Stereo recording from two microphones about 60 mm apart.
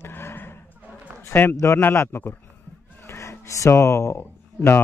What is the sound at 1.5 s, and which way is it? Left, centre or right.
Speech, left.